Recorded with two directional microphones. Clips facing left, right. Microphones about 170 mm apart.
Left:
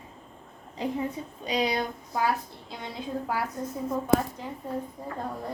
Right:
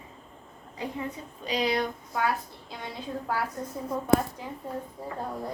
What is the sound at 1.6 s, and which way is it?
Speech, 25° left (ahead or behind).